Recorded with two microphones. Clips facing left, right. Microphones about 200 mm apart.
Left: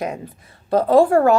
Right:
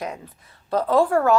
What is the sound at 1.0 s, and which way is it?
Speech, 30° left (ahead or behind).